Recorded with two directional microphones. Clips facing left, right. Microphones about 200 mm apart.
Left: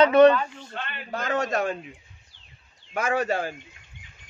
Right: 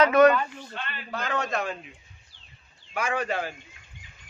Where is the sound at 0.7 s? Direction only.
45° left (ahead or behind).